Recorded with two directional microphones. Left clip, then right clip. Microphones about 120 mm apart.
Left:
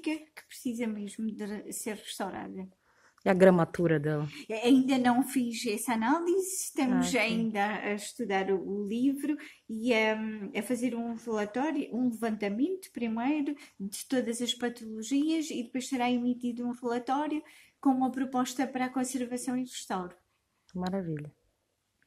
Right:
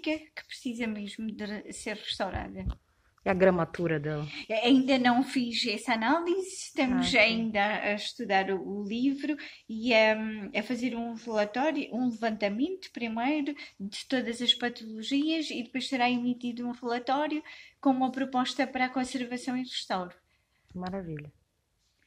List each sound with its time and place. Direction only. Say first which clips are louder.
0.0 s a woman's voice: right 3 dB; 10° right (ahead or behind)
0.7 s speech: left 1 dB; 20° right (ahead or behind)
3.3 s speech: left 2 dB; 90° left
4.3 s speech: right 3 dB; 5° right (ahead or behind)
20.7 s speech: left 2 dB; 70° left (ahead or behind)